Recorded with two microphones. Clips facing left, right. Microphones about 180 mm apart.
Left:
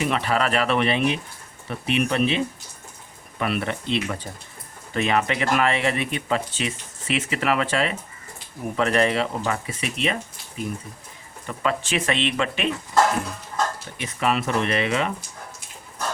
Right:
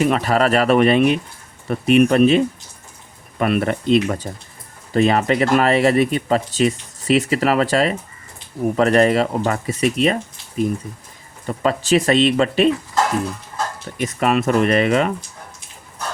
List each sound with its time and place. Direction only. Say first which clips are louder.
0.0 s speech: right 6 dB; 40° right (ahead or behind)
11.4 s speech: right 6 dB; 35° right (ahead or behind)
14.0 s speech: right 6 dB; 45° right (ahead or behind)